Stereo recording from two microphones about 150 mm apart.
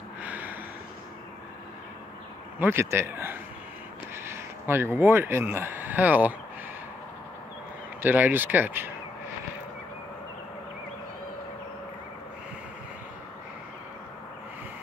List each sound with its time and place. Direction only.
0.2 s a sound: 10° right (ahead or behind)
2.6 s speech: 15° right (ahead or behind)
8.0 s speech: 15° right (ahead or behind)